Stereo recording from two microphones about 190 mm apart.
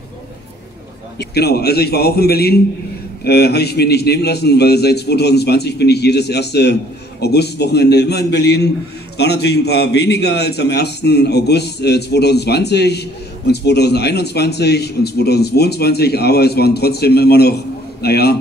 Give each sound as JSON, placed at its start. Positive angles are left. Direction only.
{"t": 1.1, "sound": "a man's voice", "side_deg": 60}